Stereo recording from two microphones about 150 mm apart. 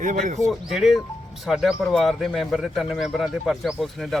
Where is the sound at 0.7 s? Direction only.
Centre (ahead or behind).